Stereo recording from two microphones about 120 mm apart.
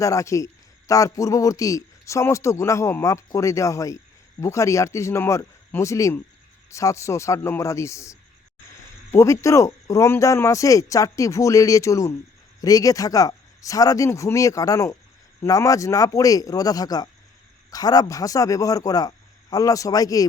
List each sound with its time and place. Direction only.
0.0 s a man's voice: 25° left (ahead or behind)